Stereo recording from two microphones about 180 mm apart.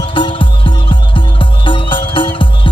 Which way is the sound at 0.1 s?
30° left (ahead or behind).